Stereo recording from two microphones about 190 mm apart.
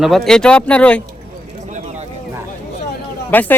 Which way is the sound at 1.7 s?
35° right (ahead or behind).